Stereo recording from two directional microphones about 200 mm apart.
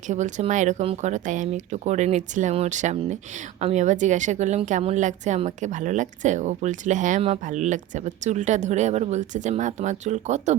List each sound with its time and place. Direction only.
0.1 s a woman's voice: 35° right (ahead or behind)